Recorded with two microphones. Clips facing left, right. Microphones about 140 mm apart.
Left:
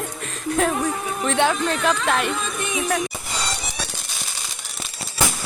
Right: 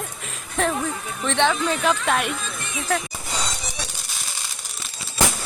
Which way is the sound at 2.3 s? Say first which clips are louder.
Left 5 dB; 70° left (ahead or behind).